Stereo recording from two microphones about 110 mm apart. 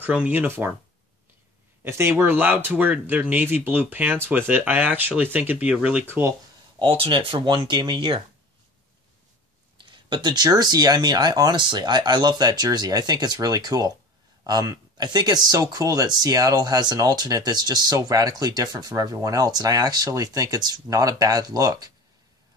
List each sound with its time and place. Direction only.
0.0 s speech: 15° right (ahead or behind)
1.9 s speech: 25° right (ahead or behind)
6.8 s speech: 55° right (ahead or behind)
9.8 s speech: 45° right (ahead or behind)